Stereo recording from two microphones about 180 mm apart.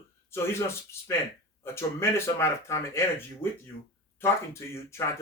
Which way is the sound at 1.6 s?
15° left (ahead or behind).